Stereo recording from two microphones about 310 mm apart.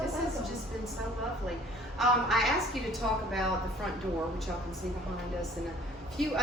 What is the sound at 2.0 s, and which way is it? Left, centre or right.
A woman's voice, centre.